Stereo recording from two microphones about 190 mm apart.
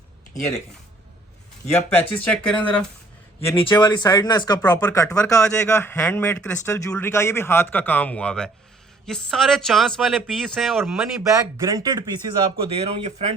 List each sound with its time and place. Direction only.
1.7 s a man's voice: 10° left (ahead or behind)
3.6 s a man's voice: 25° left (ahead or behind)
5.1 s a man's voice: 5° left (ahead or behind)
11.2 s speech: 15° right (ahead or behind)
12.6 s speech: 30° right (ahead or behind)